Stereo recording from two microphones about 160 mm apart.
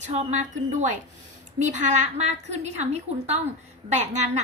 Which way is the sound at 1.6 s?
50° right (ahead or behind).